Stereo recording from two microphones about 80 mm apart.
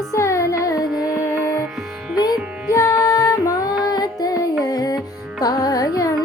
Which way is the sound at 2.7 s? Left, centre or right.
Left.